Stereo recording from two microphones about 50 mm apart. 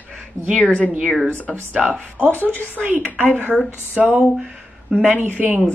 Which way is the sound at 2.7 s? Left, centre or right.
Right.